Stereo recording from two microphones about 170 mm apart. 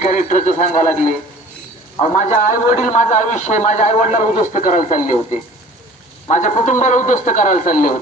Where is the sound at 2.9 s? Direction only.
45° left (ahead or behind).